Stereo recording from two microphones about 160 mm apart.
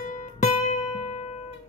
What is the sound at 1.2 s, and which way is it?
Music, 45° left (ahead or behind).